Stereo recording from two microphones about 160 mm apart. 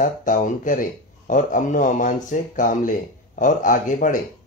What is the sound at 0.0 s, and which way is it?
Speech, 55° left (ahead or behind).